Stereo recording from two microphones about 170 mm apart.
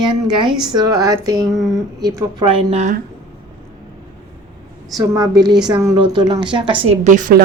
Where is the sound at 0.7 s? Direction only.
25° right (ahead or behind).